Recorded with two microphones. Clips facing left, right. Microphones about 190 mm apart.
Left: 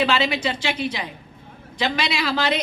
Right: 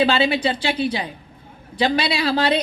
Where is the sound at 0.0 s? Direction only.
30° right (ahead or behind).